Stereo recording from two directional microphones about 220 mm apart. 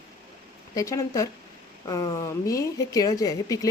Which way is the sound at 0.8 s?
15° left (ahead or behind).